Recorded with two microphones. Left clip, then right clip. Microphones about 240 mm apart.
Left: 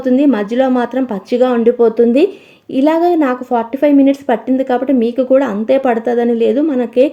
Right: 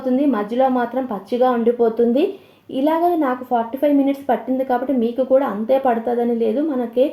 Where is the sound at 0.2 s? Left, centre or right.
Left.